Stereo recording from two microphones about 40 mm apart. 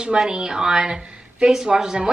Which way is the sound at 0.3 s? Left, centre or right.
Centre.